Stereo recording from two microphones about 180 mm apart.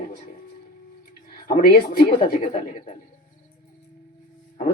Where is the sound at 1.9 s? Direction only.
50° left (ahead or behind).